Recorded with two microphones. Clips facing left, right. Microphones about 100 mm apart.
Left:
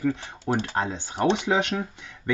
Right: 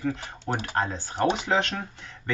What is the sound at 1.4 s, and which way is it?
Speech, 15° left (ahead or behind).